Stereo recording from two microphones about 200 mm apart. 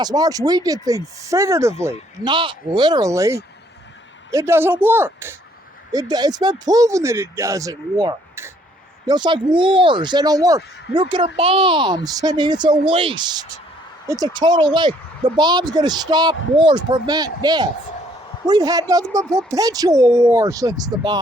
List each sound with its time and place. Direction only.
0.0 s speech: 20° right (ahead or behind)